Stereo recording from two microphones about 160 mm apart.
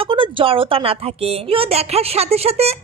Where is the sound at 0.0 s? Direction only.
35° right (ahead or behind).